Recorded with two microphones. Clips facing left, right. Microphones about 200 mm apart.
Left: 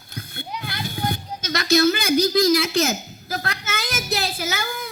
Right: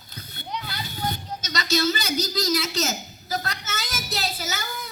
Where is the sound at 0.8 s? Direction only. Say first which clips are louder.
Left 6 dB; 55° left (ahead or behind).